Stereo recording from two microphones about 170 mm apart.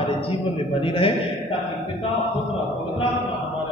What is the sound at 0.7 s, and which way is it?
Speech, 30° left (ahead or behind).